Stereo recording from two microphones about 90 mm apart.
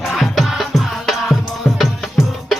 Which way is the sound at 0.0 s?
Centre (ahead or behind).